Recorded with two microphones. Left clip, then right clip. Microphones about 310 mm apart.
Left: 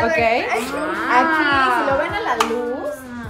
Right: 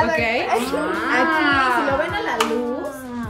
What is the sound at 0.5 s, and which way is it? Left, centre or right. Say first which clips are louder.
Speech: right 1 dB; centre.